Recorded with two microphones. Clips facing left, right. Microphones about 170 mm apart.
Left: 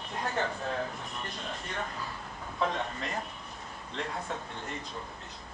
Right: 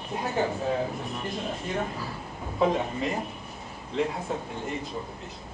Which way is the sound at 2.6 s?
5° right (ahead or behind).